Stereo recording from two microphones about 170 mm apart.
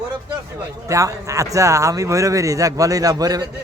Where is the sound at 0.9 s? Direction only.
20° right (ahead or behind).